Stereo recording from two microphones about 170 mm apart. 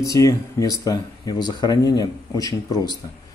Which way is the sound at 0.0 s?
20° left (ahead or behind).